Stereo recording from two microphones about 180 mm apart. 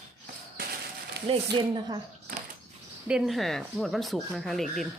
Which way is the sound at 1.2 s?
30° right (ahead or behind).